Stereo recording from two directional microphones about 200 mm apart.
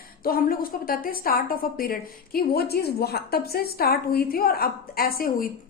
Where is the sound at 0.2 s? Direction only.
45° left (ahead or behind).